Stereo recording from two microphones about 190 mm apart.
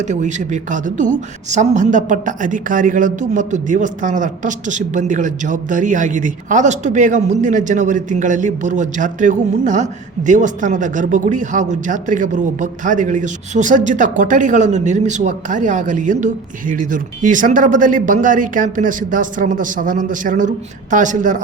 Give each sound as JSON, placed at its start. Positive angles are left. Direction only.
{"t": 0.0, "sound": "a woman's voice", "side_deg": -40}